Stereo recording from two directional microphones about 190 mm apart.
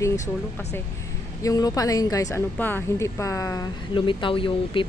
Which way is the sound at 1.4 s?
20° left (ahead or behind).